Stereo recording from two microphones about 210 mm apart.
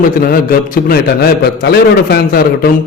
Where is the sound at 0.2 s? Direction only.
45° left (ahead or behind).